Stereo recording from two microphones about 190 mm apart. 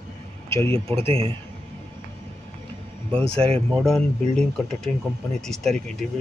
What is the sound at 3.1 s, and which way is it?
Speech, 30° right (ahead or behind).